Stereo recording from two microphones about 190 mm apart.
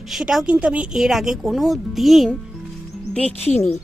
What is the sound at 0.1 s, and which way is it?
A woman's voice, centre (ahead or behind).